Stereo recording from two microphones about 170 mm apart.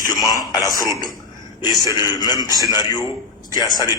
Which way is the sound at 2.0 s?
25° left (ahead or behind).